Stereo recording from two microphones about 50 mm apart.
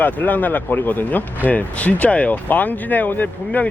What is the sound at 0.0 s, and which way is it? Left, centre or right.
Speech, left.